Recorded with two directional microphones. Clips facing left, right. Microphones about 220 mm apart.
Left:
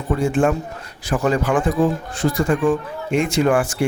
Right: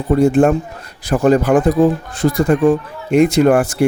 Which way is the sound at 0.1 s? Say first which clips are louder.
Right 6 dB; 40° right (ahead or behind).